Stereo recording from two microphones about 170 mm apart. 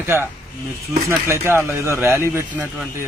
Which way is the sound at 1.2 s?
15° right (ahead or behind).